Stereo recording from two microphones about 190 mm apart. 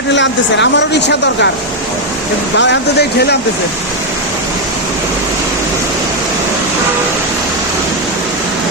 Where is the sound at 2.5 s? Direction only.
70° left (ahead or behind).